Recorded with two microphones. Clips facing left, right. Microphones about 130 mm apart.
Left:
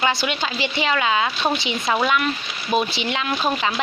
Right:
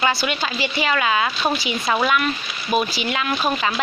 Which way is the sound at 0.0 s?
20° left (ahead or behind).